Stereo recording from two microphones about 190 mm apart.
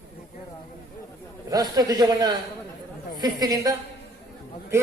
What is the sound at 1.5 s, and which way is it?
A man's voice, 20° right (ahead or behind).